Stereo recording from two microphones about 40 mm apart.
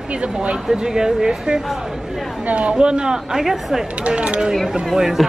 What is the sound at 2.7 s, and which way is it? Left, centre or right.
Speech, right.